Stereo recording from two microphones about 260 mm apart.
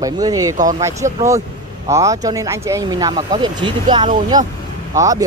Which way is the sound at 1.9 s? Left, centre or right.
Centre.